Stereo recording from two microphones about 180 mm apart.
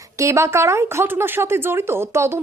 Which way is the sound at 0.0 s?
15° right (ahead or behind).